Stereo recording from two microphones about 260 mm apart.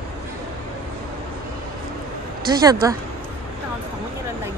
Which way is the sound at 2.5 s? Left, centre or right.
Centre.